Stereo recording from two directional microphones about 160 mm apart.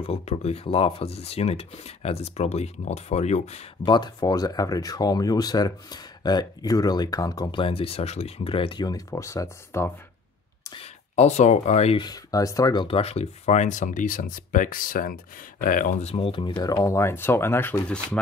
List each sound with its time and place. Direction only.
0.0 s speech: 40° left (ahead or behind)
3.8 s speech: 30° left (ahead or behind)
10.7 s speech: 40° left (ahead or behind)
12.0 s speech: 25° left (ahead or behind)
12.8 s speech: 35° left (ahead or behind); by 18.2 s 5° left (ahead or behind)